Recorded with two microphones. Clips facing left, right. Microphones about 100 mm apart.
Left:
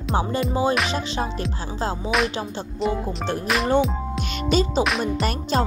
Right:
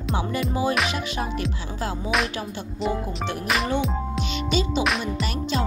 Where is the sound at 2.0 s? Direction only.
Centre (ahead or behind).